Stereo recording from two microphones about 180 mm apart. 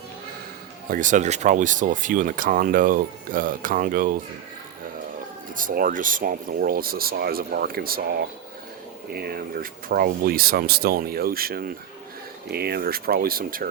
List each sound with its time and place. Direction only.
0.9 s speech: 45° right (ahead or behind)
5.5 s speech: 50° right (ahead or behind)